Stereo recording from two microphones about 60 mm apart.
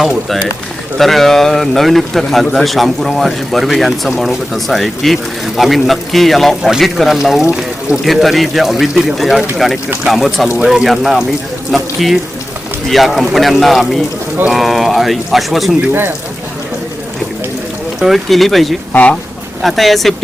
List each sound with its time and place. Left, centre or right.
0.9 s speech: centre
4.5 s speech: centre
15.9 s speech: right
18.0 s speech: centre